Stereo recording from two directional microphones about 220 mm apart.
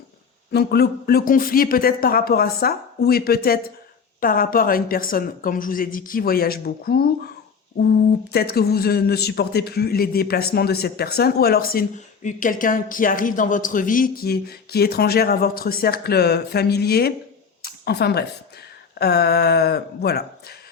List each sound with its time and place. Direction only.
0.5 s a man's voice: 45° left (ahead or behind)
8.3 s a man's voice: 45° left (ahead or behind)
17.6 s a sound: 45° left (ahead or behind)
18.9 s a man's voice: 45° left (ahead or behind)